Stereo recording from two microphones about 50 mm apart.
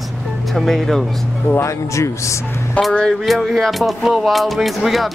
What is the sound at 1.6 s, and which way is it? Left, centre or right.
Speech, left.